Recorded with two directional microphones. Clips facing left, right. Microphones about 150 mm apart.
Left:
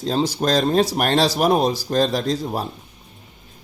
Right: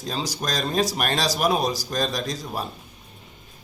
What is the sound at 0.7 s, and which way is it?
Speech, 60° left (ahead or behind).